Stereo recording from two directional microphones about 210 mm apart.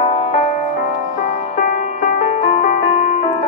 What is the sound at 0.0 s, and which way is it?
Music, 30° left (ahead or behind).